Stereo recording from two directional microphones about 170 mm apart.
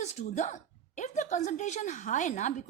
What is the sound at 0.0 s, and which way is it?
A woman's voice, 40° left (ahead or behind).